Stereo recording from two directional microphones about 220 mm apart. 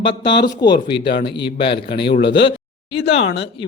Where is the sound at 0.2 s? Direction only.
20° left (ahead or behind).